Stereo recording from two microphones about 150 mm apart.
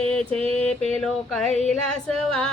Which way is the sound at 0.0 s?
5° left (ahead or behind).